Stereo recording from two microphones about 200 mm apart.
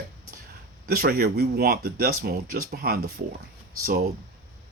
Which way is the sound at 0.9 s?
50° right (ahead or behind).